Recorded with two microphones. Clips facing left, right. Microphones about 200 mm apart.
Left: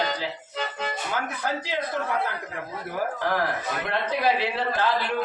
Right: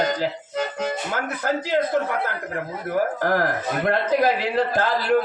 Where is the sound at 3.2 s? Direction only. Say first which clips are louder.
Right 4 dB; 50° right (ahead or behind).